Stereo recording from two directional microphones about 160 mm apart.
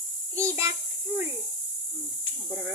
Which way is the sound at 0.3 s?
15° right (ahead or behind).